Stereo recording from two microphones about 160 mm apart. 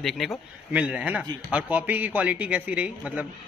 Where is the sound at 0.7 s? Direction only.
10° right (ahead or behind).